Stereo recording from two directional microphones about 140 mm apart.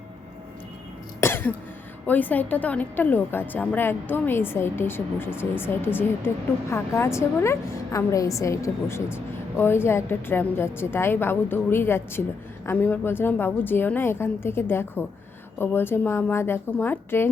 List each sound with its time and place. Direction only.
1.2 s cough: 15° left (ahead or behind)
2.0 s a woman's voice: 10° left (ahead or behind)